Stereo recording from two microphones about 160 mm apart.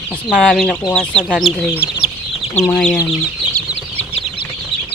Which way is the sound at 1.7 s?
10° right (ahead or behind).